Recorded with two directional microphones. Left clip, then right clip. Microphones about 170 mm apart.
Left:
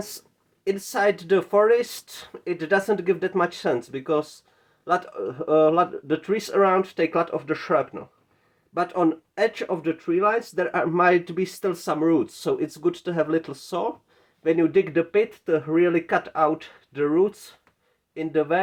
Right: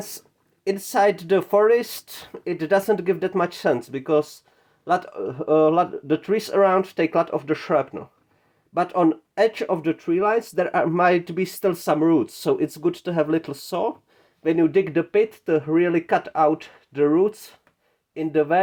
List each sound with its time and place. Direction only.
0.6 s speech: 30° right (ahead or behind)